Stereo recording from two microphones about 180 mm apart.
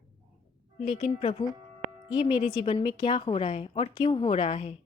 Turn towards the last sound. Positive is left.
turn(degrees=35)  # may be behind; listen again after turning